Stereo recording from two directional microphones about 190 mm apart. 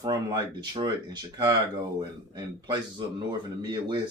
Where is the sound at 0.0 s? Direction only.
20° right (ahead or behind).